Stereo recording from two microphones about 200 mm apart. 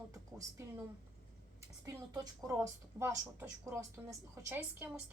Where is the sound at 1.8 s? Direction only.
20° right (ahead or behind).